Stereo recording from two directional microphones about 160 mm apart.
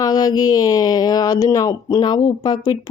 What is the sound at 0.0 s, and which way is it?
Speech, 25° left (ahead or behind).